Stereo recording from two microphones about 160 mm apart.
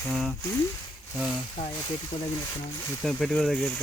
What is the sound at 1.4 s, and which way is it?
Speech, 30° left (ahead or behind).